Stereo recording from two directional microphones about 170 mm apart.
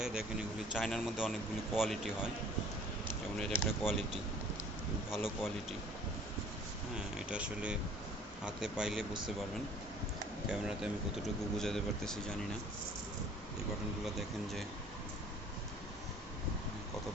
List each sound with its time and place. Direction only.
0.0 s a man's voice: 5° right (ahead or behind)
3.3 s a man's voice: centre (ahead or behind)
7.2 s a man's voice: 5° right (ahead or behind)
11.2 s a man's voice: centre (ahead or behind)
14.0 s a man's voice: centre (ahead or behind)